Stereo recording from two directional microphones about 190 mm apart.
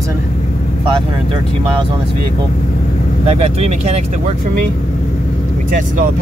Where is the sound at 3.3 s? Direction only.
35° right (ahead or behind).